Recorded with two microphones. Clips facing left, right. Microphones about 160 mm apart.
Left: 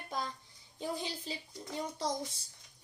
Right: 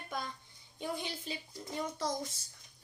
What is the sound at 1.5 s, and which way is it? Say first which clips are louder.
Speech: right 1 dB; 20° left (ahead or behind).